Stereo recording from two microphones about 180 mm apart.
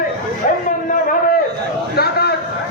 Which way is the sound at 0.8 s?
50° left (ahead or behind).